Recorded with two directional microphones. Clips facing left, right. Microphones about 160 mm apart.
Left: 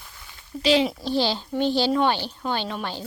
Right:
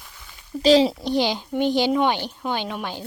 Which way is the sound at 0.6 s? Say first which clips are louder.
Right 5 dB; 35° right (ahead or behind).